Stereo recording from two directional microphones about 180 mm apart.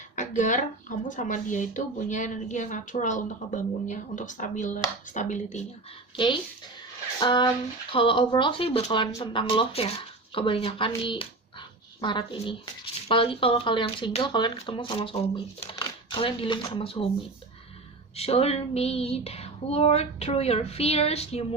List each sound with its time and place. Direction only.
0.2 s speech: 45° left (ahead or behind)
7.2 s speech: 25° left (ahead or behind)
18.2 s a sound: 35° left (ahead or behind)